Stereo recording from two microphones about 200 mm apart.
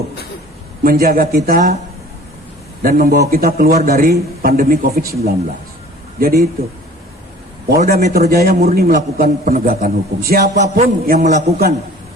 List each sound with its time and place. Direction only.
0.9 s a man's voice: 50° right (ahead or behind)
2.8 s a man's voice: 50° right (ahead or behind)
7.8 s a man's voice: 45° right (ahead or behind)